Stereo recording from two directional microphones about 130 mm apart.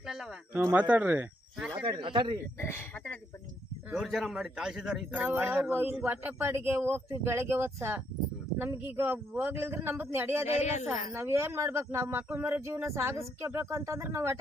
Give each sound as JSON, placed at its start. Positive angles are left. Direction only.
{"t": 0.0, "sound": "a sound", "side_deg": -5}
{"t": 0.6, "sound": "a man's voice", "side_deg": -10}
{"t": 1.8, "sound": "speech", "side_deg": -40}
{"t": 2.6, "sound": "speech", "side_deg": 15}
{"t": 3.8, "sound": "a man's voice", "side_deg": -5}
{"t": 10.4, "sound": "speech", "side_deg": 60}
{"t": 11.1, "sound": "speech", "side_deg": -20}